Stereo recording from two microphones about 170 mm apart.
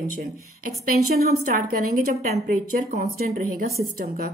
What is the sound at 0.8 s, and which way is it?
Speech, 55° right (ahead or behind).